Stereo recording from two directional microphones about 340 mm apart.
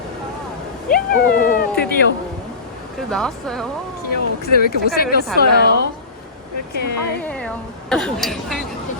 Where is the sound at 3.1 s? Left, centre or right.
Centre.